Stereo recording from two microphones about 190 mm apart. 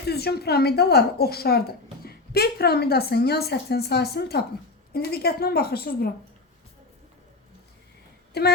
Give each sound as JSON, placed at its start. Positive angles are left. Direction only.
{"t": 0.1, "sound": "a woman's voice", "side_deg": 55}
{"t": 8.3, "sound": "speech", "side_deg": 60}